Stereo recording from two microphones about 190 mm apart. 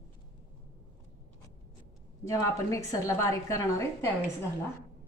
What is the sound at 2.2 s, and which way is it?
A woman's voice, 15° left (ahead or behind).